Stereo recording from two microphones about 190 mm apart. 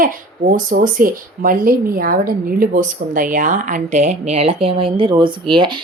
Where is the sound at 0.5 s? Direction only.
45° right (ahead or behind).